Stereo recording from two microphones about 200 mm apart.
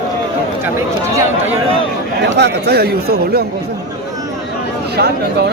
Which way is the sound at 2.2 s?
55° right (ahead or behind).